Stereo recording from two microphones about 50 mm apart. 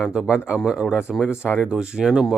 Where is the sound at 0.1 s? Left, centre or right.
Centre.